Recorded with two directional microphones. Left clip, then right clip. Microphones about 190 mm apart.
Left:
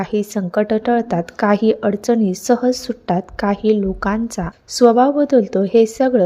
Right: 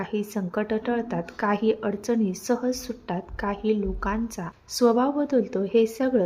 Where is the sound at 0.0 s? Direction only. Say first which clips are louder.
Left 9 dB; 30° left (ahead or behind).